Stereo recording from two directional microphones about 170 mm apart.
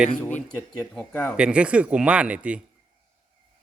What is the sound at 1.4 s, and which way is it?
Speech, 5° right (ahead or behind).